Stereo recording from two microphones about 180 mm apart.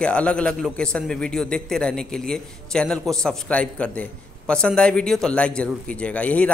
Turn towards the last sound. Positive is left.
turn(degrees=5)  # may be behind; listen again after turning